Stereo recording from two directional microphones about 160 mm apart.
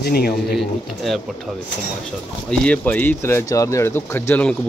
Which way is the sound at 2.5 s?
10° left (ahead or behind).